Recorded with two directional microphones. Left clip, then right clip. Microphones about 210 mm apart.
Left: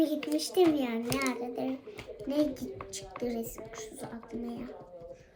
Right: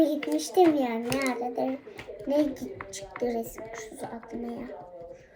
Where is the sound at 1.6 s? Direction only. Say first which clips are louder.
Right 5 dB; 15° left (ahead or behind).